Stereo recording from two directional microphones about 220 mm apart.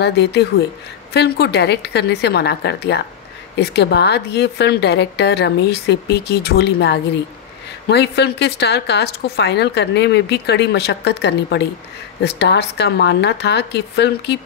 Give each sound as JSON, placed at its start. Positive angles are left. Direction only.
{"t": 0.0, "sound": "speech", "side_deg": 50}